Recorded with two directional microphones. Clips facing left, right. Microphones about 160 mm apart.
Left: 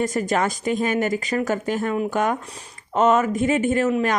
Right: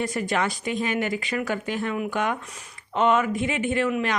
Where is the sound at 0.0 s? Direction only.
45° left (ahead or behind).